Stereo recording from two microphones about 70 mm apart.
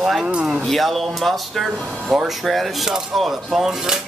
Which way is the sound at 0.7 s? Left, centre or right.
Centre.